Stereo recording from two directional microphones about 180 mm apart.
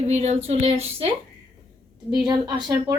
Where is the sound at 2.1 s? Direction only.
25° right (ahead or behind).